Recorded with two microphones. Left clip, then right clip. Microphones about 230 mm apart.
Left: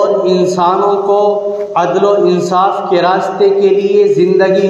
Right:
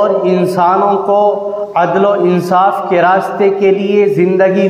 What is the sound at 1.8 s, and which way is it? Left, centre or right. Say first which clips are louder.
Mantra: even; right.